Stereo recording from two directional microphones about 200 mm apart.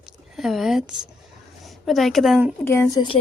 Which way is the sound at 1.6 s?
Centre (ahead or behind).